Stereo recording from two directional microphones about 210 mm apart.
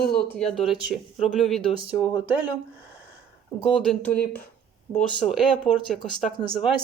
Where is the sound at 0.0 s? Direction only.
45° left (ahead or behind).